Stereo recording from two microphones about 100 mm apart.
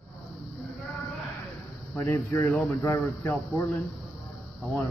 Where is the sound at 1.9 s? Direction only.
25° left (ahead or behind).